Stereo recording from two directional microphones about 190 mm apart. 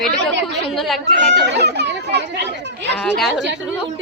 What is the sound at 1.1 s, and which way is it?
Speech, 65° right (ahead or behind).